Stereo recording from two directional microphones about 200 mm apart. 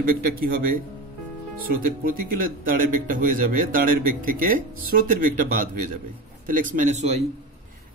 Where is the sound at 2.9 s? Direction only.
45° right (ahead or behind).